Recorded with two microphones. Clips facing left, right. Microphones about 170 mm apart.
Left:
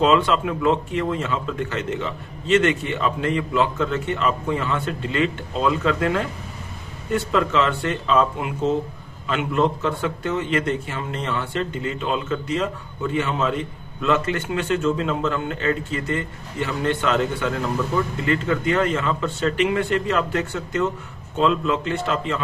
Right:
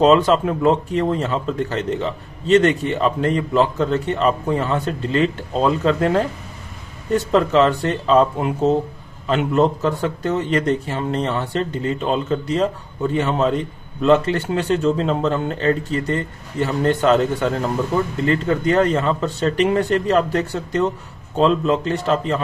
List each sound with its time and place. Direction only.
0.0 s speech: 40° right (ahead or behind)